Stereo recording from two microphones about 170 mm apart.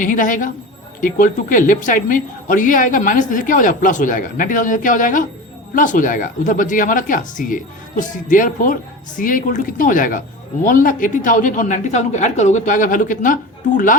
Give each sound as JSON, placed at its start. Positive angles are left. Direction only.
{"t": 0.0, "sound": "speech", "side_deg": 50}